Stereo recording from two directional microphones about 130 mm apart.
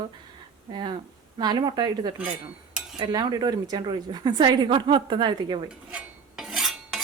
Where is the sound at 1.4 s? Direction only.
35° right (ahead or behind).